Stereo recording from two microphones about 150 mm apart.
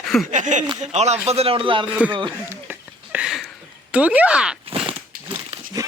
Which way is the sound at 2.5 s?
10° right (ahead or behind).